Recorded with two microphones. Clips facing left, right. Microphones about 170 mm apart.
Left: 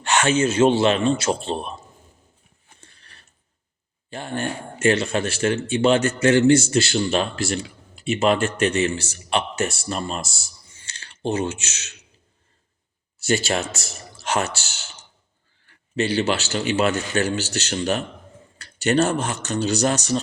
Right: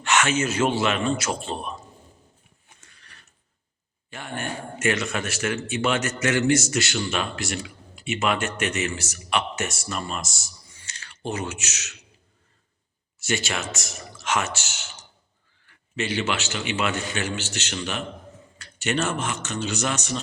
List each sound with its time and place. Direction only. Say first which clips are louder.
0.0 s a man's voice: left 3 dB; 30° left (ahead or behind)
2.8 s gears: left 3 dB; 30° left (ahead or behind)
4.1 s a man's voice: left 5 dB; 30° left (ahead or behind)
13.1 s speech: left 6 dB; 35° left (ahead or behind)
16.0 s speech: left 5 dB; 35° left (ahead or behind)